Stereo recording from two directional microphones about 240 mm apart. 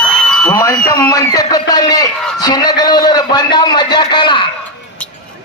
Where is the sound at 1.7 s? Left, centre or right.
Centre.